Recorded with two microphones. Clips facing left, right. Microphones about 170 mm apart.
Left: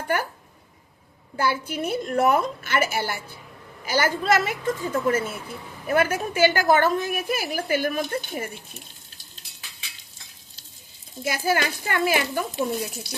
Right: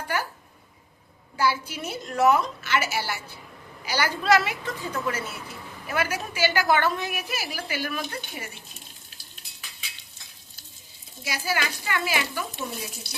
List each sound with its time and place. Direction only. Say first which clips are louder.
0.1 s a woman's voice: left 3 dB; 55° left (ahead or behind)
1.4 s a woman's voice: left 1 dB; 55° left (ahead or behind)
11.2 s a woman's voice: left 5 dB; 50° left (ahead or behind)